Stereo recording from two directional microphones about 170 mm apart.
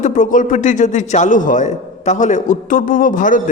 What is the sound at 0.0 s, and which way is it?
A man's voice, 50° left (ahead or behind).